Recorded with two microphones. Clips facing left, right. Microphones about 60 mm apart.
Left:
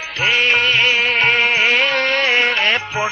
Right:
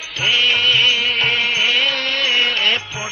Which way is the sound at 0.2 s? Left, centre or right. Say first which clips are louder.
Left 2 dB; left.